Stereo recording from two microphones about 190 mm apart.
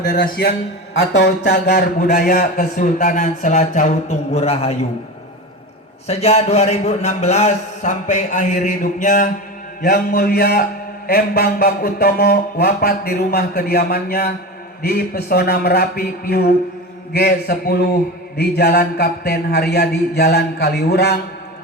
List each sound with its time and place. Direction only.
0.1 s a man's voice: 45° left (ahead or behind)
0.9 s a man's voice: 65° left (ahead or behind); by 4.9 s 35° left (ahead or behind)
6.1 s a man's voice: 35° left (ahead or behind)
9.8 s a man's voice: 55° left (ahead or behind)